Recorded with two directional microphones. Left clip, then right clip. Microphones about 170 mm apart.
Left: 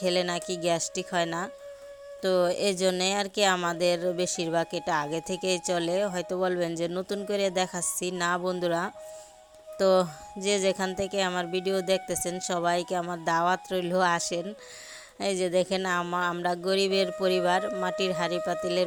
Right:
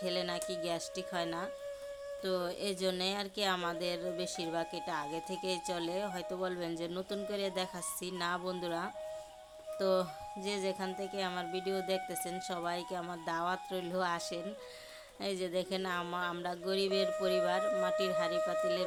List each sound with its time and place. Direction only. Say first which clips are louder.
0.0 s speech: left 9 dB; 40° left (ahead or behind)